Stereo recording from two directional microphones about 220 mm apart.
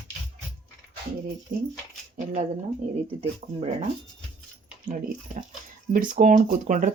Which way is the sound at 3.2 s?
30° right (ahead or behind).